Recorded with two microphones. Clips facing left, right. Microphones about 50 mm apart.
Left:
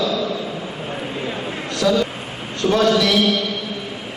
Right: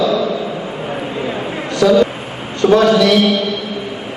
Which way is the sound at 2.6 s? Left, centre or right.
Centre.